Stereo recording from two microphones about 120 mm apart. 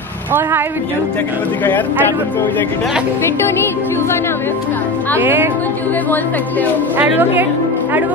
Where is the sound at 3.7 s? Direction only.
20° left (ahead or behind).